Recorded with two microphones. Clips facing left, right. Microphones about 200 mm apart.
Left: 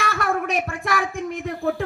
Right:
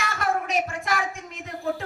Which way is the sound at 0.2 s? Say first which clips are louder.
Right 1 dB; 55° left (ahead or behind).